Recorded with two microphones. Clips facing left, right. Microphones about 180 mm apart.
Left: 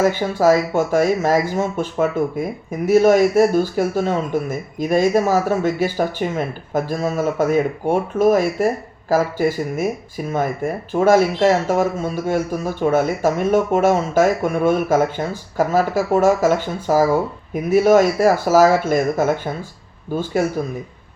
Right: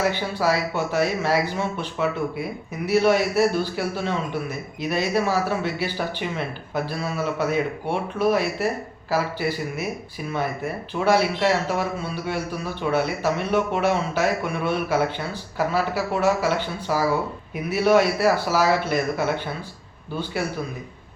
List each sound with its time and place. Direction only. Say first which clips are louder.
0.0 s speech: left 7 dB; 45° left (ahead or behind)